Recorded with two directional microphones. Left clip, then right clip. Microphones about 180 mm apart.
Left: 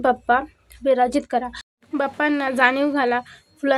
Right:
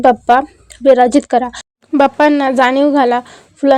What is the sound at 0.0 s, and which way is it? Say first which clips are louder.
A woman's voice: right 9 dB; 35° right (ahead or behind).